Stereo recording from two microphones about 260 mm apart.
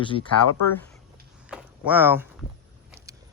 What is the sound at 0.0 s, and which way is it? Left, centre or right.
Speech, centre.